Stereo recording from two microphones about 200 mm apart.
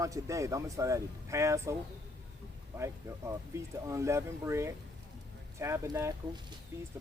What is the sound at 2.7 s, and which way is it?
Speech, 15° right (ahead or behind).